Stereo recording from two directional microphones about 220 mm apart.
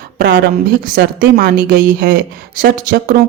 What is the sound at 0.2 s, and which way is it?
A woman's voice, 40° right (ahead or behind).